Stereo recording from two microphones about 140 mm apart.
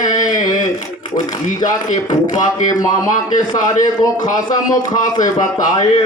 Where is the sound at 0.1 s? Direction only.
25° left (ahead or behind).